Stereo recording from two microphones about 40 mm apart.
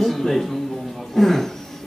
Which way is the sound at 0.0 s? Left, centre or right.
Centre.